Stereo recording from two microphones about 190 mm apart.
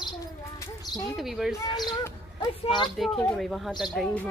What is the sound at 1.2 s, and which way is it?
Speech, centre (ahead or behind).